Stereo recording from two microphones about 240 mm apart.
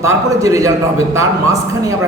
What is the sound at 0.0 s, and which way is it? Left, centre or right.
A man's voice, centre.